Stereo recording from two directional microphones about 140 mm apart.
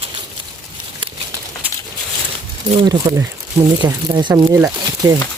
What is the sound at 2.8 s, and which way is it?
Speech, 30° right (ahead or behind).